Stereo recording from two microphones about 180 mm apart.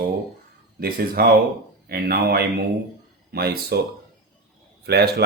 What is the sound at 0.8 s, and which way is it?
Speech, 55° right (ahead or behind).